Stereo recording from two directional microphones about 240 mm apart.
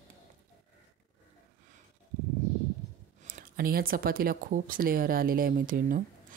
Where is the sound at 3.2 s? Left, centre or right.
Right.